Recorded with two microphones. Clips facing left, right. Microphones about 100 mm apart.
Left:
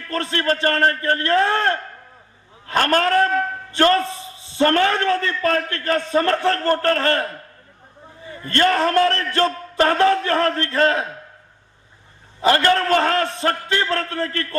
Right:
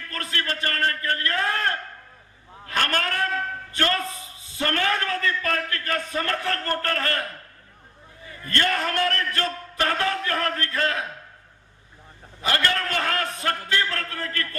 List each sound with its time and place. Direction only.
0.1 s a man's voice: 30° left (ahead or behind)
12.4 s a man's voice: 35° left (ahead or behind)